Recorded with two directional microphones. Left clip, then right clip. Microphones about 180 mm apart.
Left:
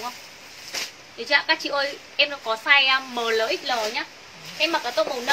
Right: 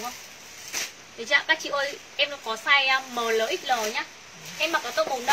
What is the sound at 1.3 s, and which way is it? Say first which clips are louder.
A woman's voice: left 2 dB; 20° left (ahead or behind).